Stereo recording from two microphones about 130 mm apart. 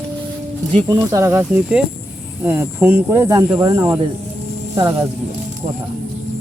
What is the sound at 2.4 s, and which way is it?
Speech, 15° right (ahead or behind).